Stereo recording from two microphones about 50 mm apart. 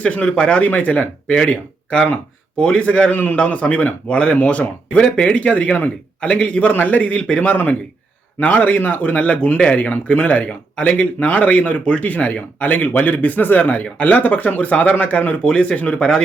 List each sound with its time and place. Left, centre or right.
0.0 s speech: left
3.1 s speech: left; by 16.2 s centre